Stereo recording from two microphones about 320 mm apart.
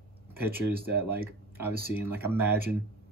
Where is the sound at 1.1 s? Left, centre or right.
Centre.